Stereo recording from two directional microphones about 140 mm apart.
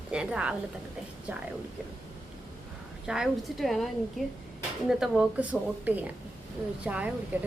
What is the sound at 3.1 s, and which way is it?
Speech, centre (ahead or behind).